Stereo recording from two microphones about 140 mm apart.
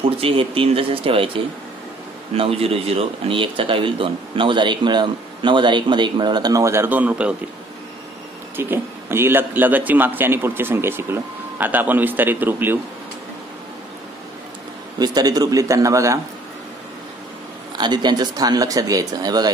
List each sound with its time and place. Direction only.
0.2 s a man's voice: 40° right (ahead or behind); by 7.3 s 10° right (ahead or behind)
8.5 s a man's voice: 15° right (ahead or behind)
15.0 s speech: 30° right (ahead or behind)
17.7 s speech: 30° right (ahead or behind)